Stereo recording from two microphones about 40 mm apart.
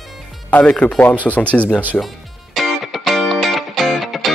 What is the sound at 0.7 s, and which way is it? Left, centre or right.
Speech, left.